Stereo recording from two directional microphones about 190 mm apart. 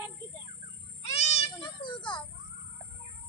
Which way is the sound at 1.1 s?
35° left (ahead or behind).